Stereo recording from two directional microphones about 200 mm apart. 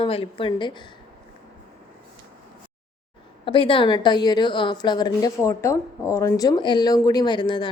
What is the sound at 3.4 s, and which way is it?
A woman's voice, 25° left (ahead or behind).